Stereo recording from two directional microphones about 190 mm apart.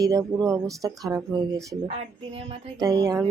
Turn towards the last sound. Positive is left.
turn(degrees=-20)  # may be behind; listen again after turning